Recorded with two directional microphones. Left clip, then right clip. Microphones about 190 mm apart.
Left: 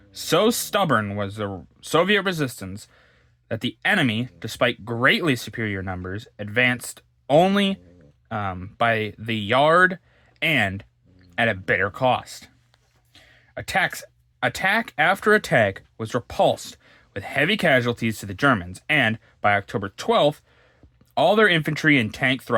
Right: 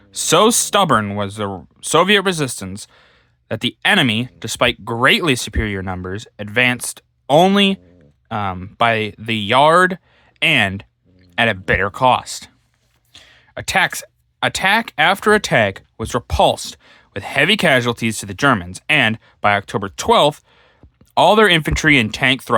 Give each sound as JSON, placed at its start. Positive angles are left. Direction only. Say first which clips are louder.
{"t": 0.1, "sound": "speech", "louder": "right 7 dB", "side_deg": -35}